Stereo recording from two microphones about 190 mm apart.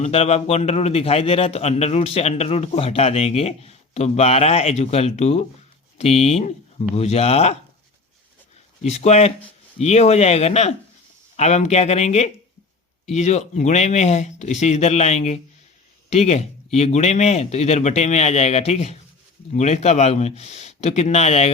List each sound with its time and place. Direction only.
0.0 s a man's voice: 35° left (ahead or behind)
8.8 s a man's voice: 35° left (ahead or behind)